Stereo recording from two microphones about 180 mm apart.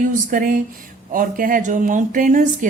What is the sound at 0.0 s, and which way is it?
A woman's voice, 50° right (ahead or behind).